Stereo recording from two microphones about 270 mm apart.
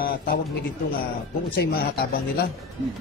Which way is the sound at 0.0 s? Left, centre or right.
Left.